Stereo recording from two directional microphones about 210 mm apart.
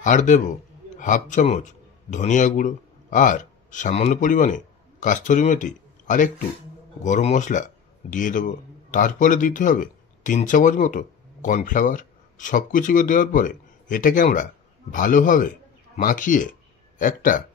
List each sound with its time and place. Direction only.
0.0 s a man's voice: 35° left (ahead or behind)